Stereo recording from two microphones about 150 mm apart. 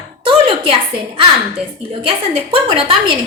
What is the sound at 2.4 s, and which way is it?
Speech, 40° right (ahead or behind).